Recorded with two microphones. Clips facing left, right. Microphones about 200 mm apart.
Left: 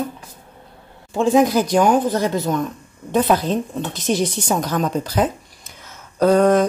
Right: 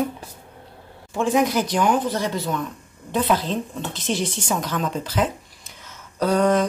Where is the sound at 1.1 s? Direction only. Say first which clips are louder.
Left 5 dB; 30° left (ahead or behind).